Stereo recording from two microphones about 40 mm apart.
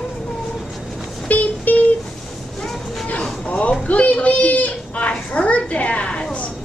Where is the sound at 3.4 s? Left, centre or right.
Left.